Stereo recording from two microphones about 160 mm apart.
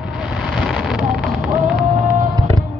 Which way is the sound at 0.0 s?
5° right (ahead or behind).